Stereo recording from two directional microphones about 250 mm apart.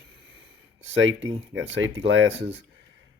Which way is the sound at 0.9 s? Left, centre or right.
Right.